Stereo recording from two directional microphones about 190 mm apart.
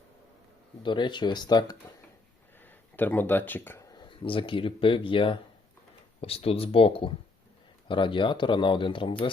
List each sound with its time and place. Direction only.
0.8 s speech: 25° left (ahead or behind)
2.6 s speech: 10° left (ahead or behind)
3.9 s speech: 25° left (ahead or behind)